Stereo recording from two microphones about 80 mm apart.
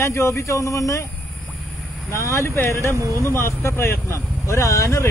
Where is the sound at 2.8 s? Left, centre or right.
Right.